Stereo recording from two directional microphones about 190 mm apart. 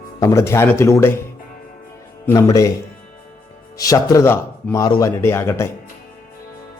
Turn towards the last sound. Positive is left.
turn(degrees=15)  # may be behind; listen again after turning